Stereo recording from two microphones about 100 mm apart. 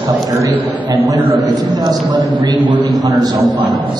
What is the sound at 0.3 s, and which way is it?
A man's voice, 35° right (ahead or behind).